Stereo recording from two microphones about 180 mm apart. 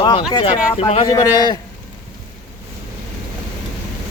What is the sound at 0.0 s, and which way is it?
Speech, 25° left (ahead or behind).